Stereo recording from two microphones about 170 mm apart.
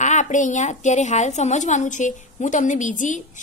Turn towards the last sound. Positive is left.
turn(degrees=45)  # may be behind; listen again after turning